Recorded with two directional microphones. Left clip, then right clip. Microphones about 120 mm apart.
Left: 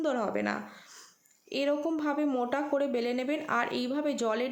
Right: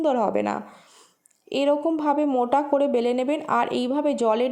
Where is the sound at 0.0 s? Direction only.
40° right (ahead or behind).